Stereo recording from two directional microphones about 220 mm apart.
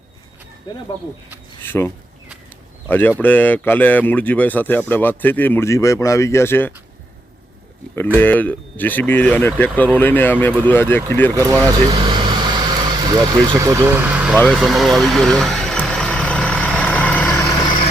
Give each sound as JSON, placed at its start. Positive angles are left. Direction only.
{"t": 1.6, "sound": "speech", "side_deg": 10}
{"t": 2.9, "sound": "speech", "side_deg": 10}
{"t": 8.1, "sound": "speech", "side_deg": 10}
{"t": 11.4, "sound": "vehicle", "side_deg": -15}